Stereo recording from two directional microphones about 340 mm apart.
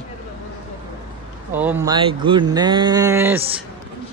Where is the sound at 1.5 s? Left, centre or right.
Centre.